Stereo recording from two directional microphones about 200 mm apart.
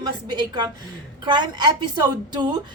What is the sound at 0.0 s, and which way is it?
Speech, 20° right (ahead or behind).